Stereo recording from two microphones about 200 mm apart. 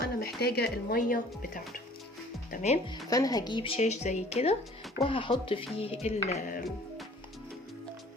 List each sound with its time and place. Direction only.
0.3 s speech: 55° left (ahead or behind)
3.1 s speech: 20° left (ahead or behind); by 6.7 s 40° left (ahead or behind)